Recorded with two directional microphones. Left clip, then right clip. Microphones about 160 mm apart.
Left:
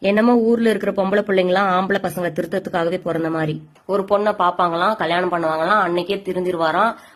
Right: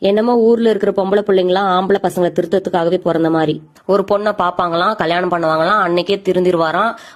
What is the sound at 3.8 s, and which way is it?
Speech, 40° right (ahead or behind).